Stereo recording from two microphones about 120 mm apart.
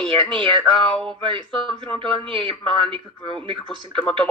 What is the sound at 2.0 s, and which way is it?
Speech, 45° right (ahead or behind).